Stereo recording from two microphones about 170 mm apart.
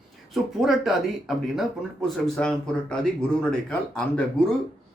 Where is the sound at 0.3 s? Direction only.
Centre (ahead or behind).